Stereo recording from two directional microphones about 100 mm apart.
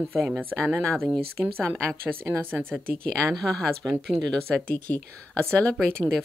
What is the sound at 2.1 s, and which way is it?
Speech, 20° right (ahead or behind).